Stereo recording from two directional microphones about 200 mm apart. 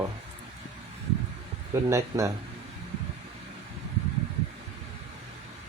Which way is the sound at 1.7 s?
15° right (ahead or behind).